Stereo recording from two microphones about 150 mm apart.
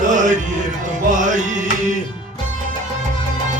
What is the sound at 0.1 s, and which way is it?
Music, 55° right (ahead or behind).